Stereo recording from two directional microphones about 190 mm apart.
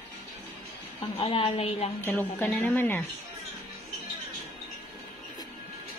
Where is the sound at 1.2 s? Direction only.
30° left (ahead or behind).